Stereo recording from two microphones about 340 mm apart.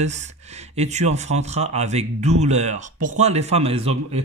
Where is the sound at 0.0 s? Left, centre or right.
Centre.